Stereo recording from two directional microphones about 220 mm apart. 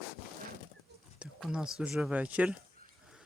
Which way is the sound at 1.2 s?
5° right (ahead or behind).